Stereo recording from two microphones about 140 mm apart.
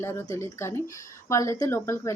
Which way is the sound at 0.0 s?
15° left (ahead or behind).